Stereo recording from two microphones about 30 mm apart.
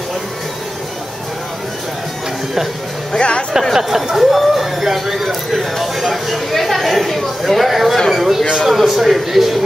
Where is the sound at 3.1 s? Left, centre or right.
Left.